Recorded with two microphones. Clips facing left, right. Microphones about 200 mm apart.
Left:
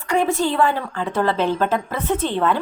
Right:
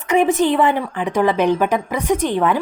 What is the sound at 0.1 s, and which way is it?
A woman's voice, 20° right (ahead or behind).